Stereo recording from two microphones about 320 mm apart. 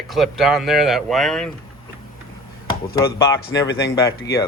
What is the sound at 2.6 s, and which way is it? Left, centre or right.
Speech, centre.